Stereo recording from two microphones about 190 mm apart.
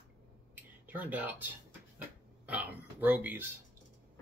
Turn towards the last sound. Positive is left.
turn(degrees=-10)  # may be behind; listen again after turning